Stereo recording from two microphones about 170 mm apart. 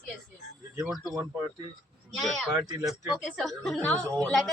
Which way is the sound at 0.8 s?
5° right (ahead or behind).